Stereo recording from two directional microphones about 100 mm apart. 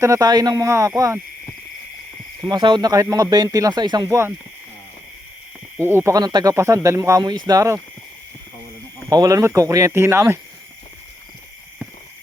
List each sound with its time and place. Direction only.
0.0 s speech: 35° right (ahead or behind)
2.4 s speech: 50° right (ahead or behind)
5.9 s speech: 25° right (ahead or behind)
6.1 s speech: 40° right (ahead or behind)
7.3 s speech: 45° right (ahead or behind)
9.0 s speech: 40° right (ahead or behind)